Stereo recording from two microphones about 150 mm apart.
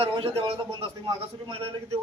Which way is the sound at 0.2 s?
40° right (ahead or behind).